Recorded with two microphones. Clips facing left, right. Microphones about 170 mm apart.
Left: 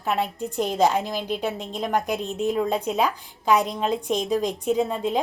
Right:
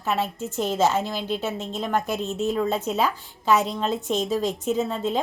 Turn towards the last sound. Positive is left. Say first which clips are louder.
# left 1 dB
turn(degrees=10)  # may be behind; listen again after turning